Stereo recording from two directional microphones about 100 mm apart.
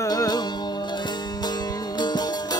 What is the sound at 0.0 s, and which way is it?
Music, 40° left (ahead or behind).